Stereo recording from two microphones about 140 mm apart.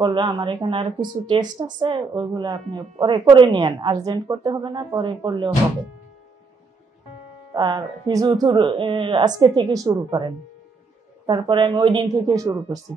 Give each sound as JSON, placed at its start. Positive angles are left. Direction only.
{"t": 0.0, "sound": "speech", "side_deg": -30}
{"t": 7.5, "sound": "speech", "side_deg": -30}